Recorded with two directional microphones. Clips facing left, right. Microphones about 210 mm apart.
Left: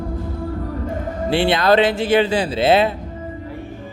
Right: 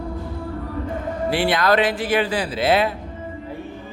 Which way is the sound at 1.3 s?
25° left (ahead or behind).